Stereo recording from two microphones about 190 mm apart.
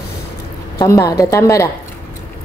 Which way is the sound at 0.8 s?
15° left (ahead or behind).